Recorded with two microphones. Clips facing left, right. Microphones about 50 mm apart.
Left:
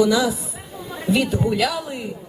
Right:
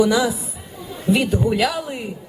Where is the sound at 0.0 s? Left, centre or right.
Right.